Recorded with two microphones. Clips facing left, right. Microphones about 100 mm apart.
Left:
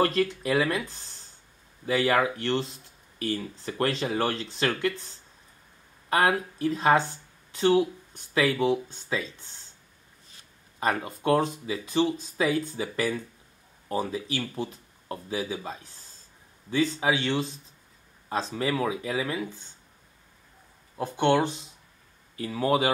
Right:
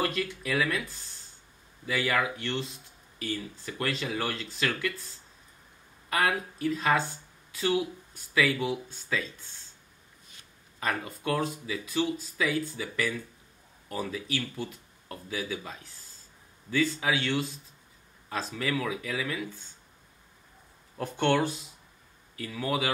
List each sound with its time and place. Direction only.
0.0 s speech: 35° left (ahead or behind)
6.0 s speech: 35° left (ahead or behind)
10.8 s speech: 30° left (ahead or behind)
21.0 s speech: 15° left (ahead or behind)
22.3 s speech: 35° left (ahead or behind)